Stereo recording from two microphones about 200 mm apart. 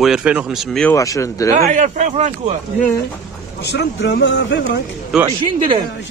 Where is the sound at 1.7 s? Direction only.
35° right (ahead or behind).